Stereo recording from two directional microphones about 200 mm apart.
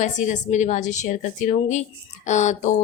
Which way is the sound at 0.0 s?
35° left (ahead or behind).